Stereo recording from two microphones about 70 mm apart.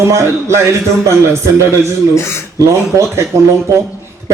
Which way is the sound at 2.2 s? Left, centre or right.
Left.